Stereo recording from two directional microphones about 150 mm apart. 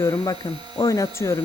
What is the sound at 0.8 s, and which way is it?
Speech, 20° left (ahead or behind).